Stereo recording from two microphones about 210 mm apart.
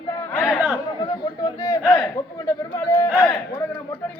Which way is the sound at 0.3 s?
Centre (ahead or behind).